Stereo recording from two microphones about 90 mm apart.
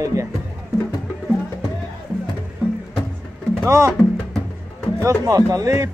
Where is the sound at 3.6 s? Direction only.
35° right (ahead or behind).